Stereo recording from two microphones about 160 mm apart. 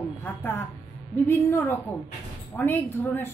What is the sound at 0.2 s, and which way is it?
A woman's voice, 10° left (ahead or behind).